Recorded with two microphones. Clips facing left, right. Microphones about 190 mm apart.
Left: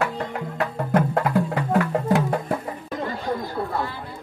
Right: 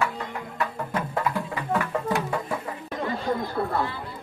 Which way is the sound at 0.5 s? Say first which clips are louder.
Left 7 dB; 60° left (ahead or behind).